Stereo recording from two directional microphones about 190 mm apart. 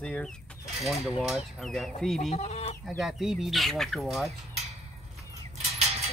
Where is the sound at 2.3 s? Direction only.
35° left (ahead or behind).